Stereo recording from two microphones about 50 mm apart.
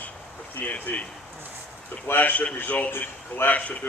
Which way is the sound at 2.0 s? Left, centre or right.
Left.